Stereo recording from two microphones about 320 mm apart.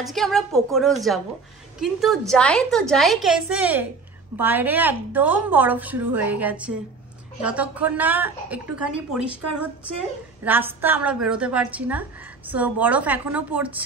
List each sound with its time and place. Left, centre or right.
0.0 s a woman's voice: centre